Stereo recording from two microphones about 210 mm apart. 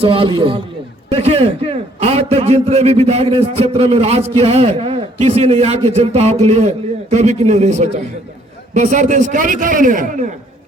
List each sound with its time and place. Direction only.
0.0 s a man's voice: 25° right (ahead or behind)